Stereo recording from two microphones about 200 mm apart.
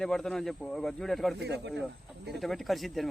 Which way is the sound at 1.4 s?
60° right (ahead or behind).